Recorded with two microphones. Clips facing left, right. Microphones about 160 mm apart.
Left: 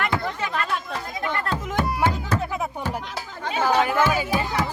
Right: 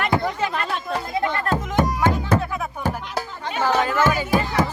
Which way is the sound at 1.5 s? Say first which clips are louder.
Right 4 dB; 45° right (ahead or behind).